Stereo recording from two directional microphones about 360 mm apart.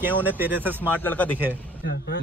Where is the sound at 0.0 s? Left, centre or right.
Centre.